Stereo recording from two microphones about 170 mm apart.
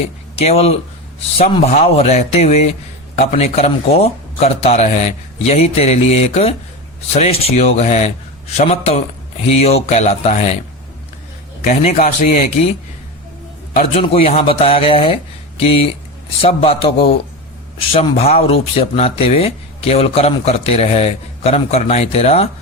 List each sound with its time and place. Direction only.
0.3 s speech: 35° left (ahead or behind)
11.7 s speech: 40° left (ahead or behind)
13.9 s speech: 35° left (ahead or behind)